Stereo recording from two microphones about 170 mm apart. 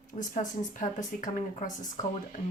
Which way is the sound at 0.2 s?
50° left (ahead or behind).